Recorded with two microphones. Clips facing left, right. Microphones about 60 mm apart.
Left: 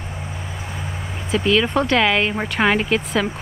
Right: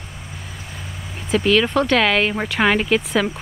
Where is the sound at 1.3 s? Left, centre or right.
Centre.